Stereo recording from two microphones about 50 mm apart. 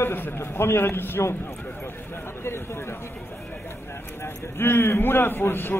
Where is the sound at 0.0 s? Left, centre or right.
Left.